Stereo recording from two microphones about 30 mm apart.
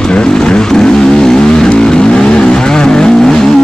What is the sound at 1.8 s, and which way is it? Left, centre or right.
Vehicle, left.